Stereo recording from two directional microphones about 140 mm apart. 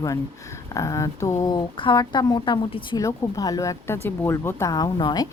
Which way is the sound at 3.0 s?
25° left (ahead or behind).